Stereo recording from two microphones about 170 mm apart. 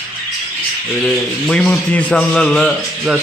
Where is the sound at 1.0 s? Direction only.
5° left (ahead or behind).